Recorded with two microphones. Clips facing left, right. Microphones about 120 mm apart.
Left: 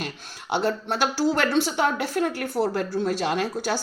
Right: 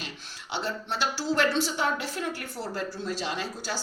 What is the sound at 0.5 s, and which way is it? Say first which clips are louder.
A woman's voice: left 7 dB; 55° left (ahead or behind).